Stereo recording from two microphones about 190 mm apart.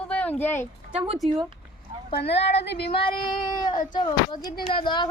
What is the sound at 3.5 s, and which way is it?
Speech, 20° left (ahead or behind).